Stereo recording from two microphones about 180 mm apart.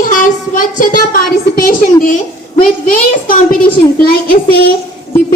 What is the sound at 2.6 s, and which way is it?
Speech, 50° left (ahead or behind).